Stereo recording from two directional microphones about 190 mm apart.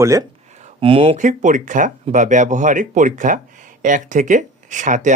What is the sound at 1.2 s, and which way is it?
Speech, 40° right (ahead or behind).